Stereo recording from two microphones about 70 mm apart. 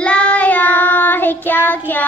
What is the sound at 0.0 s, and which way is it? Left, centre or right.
Child singing, centre.